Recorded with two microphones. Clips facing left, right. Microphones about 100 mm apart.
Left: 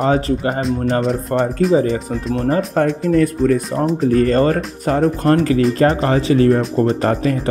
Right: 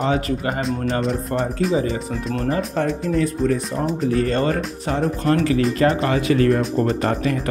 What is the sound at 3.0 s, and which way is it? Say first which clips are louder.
Speech: left 5 dB; 55° left (ahead or behind).